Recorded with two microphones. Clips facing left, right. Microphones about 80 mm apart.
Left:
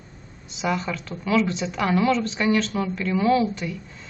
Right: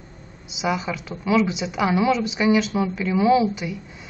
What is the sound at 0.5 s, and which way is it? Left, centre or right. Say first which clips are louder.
Speech: right 1 dB; centre.